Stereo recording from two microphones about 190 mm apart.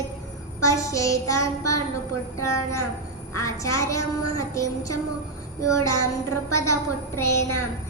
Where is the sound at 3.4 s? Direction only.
15° left (ahead or behind).